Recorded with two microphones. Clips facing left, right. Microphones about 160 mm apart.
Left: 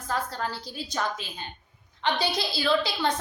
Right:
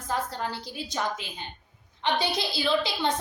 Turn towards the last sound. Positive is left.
turn(degrees=-20)  # may be behind; listen again after turning